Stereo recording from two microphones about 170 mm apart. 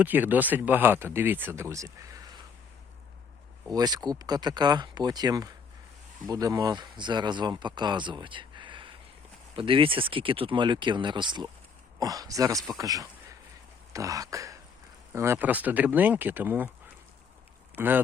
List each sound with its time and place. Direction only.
0.0 s speech: 10° right (ahead or behind)
3.7 s speech: 25° right (ahead or behind)
17.7 s speech: 10° right (ahead or behind)